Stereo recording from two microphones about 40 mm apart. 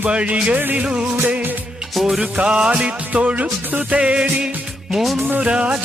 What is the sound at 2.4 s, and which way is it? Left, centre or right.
Music, right.